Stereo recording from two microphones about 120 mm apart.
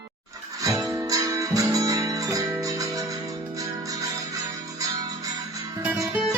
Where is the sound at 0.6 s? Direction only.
25° right (ahead or behind).